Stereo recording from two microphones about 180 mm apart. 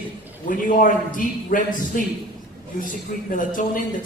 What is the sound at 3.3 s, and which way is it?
Speech, 50° left (ahead or behind).